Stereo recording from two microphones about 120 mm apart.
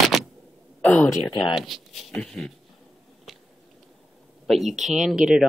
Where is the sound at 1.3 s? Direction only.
40° left (ahead or behind).